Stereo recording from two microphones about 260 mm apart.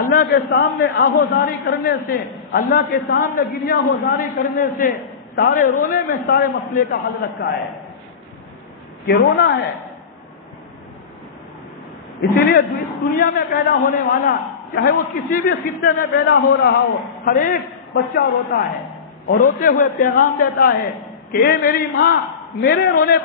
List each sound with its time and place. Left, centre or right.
0.1 s a man's voice: left
9.0 s a man's voice: left
12.2 s a man's voice: left